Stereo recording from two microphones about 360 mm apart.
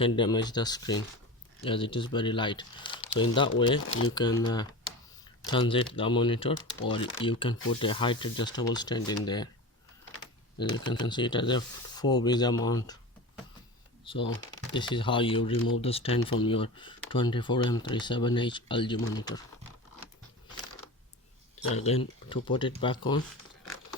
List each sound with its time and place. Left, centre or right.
0.0 s speech: centre
10.6 s speech: centre
12.6 s a sound: centre
14.0 s speech: centre
21.7 s speech: centre